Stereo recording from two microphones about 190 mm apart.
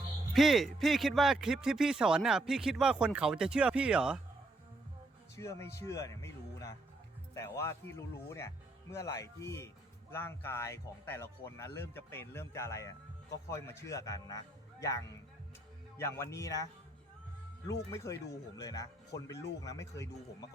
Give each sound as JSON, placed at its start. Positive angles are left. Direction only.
{"t": 0.3, "sound": "speech", "side_deg": 0}
{"t": 5.4, "sound": "speech", "side_deg": 15}
{"t": 17.9, "sound": "speech", "side_deg": 15}